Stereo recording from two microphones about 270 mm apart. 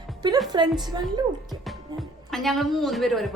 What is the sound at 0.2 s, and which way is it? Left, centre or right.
Speech, centre.